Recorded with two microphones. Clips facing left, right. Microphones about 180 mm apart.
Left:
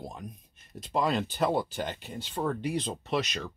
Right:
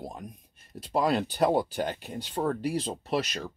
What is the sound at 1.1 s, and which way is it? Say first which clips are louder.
Speech: right 3 dB; 10° right (ahead or behind).